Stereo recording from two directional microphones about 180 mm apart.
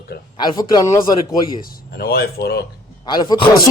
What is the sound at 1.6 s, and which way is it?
Speech, 55° left (ahead or behind).